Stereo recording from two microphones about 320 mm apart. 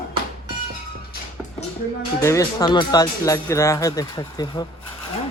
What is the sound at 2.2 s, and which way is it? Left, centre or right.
Speech, centre.